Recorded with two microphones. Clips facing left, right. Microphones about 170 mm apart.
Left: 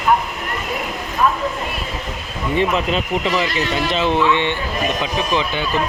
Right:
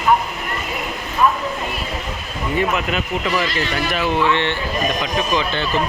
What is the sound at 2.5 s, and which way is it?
Speech, 30° left (ahead or behind).